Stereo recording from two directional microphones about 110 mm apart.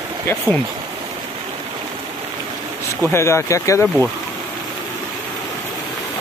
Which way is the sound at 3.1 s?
25° left (ahead or behind).